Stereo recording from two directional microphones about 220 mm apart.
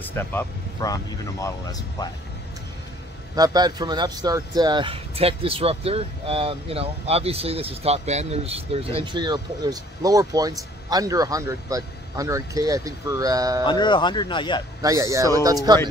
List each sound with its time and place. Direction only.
0.0 s speech: 10° left (ahead or behind)
3.3 s speech: 20° right (ahead or behind)
13.7 s speech: 20° left (ahead or behind)
14.8 s speech: 15° right (ahead or behind)